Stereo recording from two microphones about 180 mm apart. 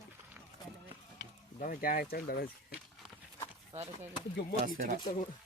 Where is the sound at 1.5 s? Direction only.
50° left (ahead or behind).